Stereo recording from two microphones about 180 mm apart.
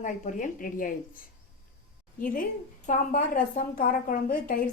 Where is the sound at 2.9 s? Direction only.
50° left (ahead or behind).